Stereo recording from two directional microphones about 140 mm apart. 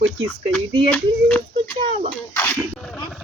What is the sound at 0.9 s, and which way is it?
Speech, 10° left (ahead or behind).